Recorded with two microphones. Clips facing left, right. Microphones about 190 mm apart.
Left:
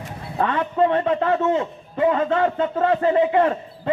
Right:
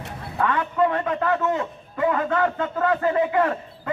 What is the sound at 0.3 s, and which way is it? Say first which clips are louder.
A man's voice: left 2 dB; 30° left (ahead or behind).